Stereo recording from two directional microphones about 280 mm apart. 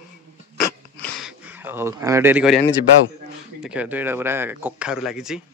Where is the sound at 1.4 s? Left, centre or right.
Centre.